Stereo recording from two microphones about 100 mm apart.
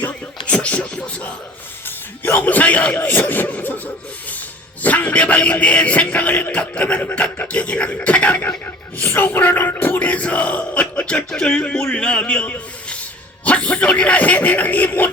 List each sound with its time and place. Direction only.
0.4 s a sound: 10° left (ahead or behind)
2.2 s speech: 15° left (ahead or behind)
4.8 s a man's voice: 15° left (ahead or behind)